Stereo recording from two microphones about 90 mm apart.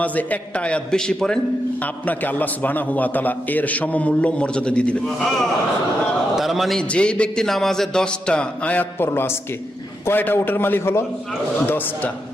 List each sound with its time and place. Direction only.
0.0 s a man's voice: 15° left (ahead or behind)
1.8 s a man's voice: 20° left (ahead or behind)
6.3 s a man's voice: centre (ahead or behind)
6.9 s a man's voice: 10° left (ahead or behind)